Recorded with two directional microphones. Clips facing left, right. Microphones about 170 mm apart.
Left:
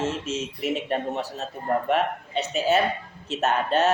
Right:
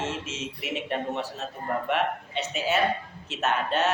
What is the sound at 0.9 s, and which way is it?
A woman's voice, 35° left (ahead or behind).